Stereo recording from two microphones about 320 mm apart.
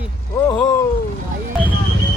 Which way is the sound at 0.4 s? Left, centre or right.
Centre.